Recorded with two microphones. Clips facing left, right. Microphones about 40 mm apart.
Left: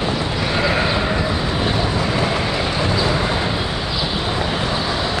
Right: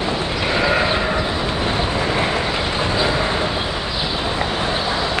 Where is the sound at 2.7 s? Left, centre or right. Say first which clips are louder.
Right 1 dB; right.